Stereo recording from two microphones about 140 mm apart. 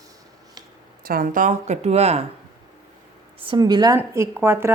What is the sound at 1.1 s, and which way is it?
Speech, 80° right.